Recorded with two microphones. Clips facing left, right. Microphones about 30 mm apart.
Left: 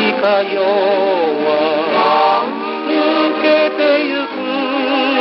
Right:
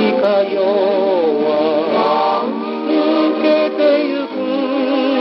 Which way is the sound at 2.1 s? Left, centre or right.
Left.